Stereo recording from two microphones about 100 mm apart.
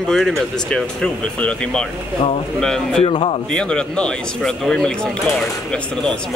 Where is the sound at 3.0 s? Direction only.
70° left (ahead or behind).